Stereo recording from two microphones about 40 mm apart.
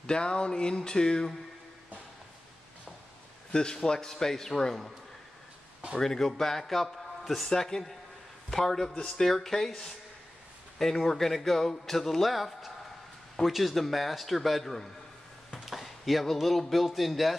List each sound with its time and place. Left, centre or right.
0.0 s a sound: left
3.5 s a man's voice: centre
5.9 s a man's voice: centre